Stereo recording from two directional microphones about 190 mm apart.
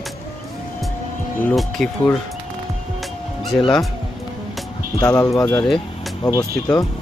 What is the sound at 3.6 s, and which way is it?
Speech, 25° left (ahead or behind).